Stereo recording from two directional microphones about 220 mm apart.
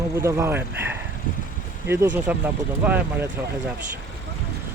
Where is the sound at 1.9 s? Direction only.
10° right (ahead or behind).